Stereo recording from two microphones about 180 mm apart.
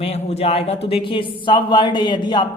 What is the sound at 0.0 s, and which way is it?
Speech, 35° left (ahead or behind).